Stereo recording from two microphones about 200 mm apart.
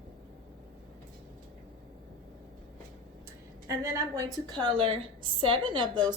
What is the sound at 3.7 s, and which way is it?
A woman's voice, 15° right (ahead or behind).